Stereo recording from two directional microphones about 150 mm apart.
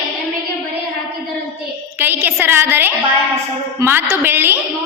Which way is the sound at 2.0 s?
15° right (ahead or behind).